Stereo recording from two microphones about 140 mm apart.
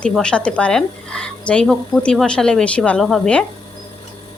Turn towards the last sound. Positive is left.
turn(degrees=5)  # may be behind; listen again after turning